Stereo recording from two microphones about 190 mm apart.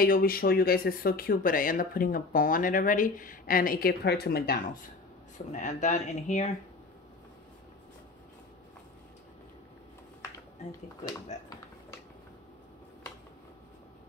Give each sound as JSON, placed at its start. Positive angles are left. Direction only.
{"t": 0.0, "sound": "speech", "side_deg": 50}
{"t": 5.5, "sound": "speech", "side_deg": 40}